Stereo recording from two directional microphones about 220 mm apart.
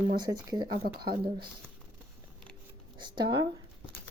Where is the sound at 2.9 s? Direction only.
20° right (ahead or behind).